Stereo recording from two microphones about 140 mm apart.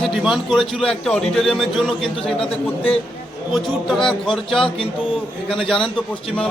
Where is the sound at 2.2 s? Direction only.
45° left (ahead or behind).